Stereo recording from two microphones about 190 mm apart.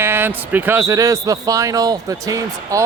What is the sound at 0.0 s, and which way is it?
A man's voice, 10° right (ahead or behind).